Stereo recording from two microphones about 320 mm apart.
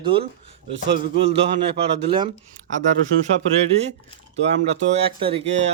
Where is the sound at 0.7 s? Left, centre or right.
Right.